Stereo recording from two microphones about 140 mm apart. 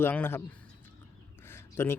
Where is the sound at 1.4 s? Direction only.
15° left (ahead or behind).